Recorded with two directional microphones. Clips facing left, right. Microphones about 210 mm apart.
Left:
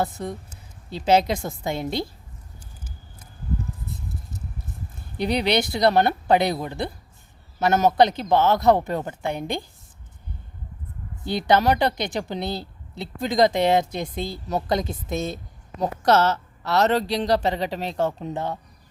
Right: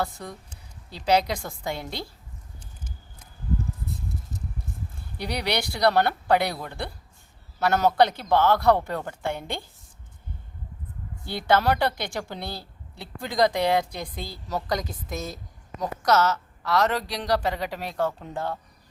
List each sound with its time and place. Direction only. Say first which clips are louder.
0.0 s a woman's voice: left 4 dB; 20° left (ahead or behind)
5.1 s a woman's voice: left 6 dB; 20° left (ahead or behind)
11.3 s a woman's voice: left 3 dB; 20° left (ahead or behind)